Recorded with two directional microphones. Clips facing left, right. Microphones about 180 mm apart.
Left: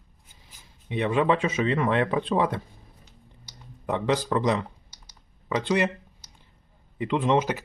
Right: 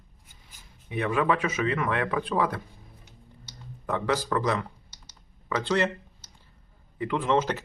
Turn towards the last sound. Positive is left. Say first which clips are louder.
# left 2 dB
turn(degrees=15)  # may be behind; listen again after turning